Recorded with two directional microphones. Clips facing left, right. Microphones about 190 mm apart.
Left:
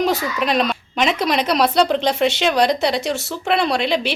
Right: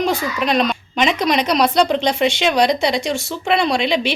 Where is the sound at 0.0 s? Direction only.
5° left (ahead or behind).